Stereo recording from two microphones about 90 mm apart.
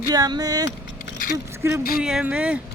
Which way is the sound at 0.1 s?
45° right (ahead or behind).